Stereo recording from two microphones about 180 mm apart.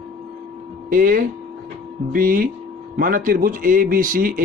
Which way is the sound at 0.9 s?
50° right (ahead or behind).